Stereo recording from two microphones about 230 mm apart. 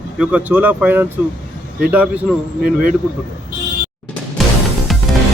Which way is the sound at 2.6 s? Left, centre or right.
Right.